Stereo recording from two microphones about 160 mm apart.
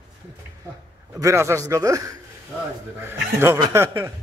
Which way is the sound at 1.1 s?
20° right (ahead or behind).